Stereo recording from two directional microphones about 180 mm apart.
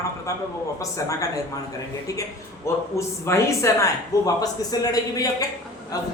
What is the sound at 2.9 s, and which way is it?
Speech, 15° left (ahead or behind).